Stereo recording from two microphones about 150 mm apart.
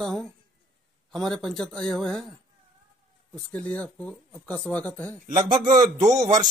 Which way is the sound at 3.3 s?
10° left (ahead or behind).